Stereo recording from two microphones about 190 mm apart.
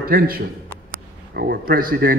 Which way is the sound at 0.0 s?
50° right (ahead or behind).